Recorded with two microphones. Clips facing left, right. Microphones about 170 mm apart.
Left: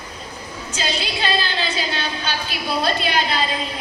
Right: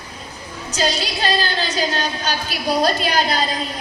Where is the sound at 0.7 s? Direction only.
40° right (ahead or behind).